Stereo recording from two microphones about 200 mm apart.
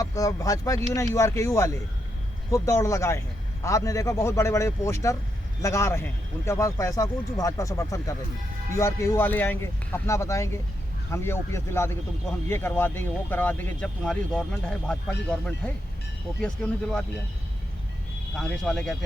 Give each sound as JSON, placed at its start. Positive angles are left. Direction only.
{"t": 0.0, "sound": "speech", "side_deg": 15}
{"t": 18.3, "sound": "speech", "side_deg": 0}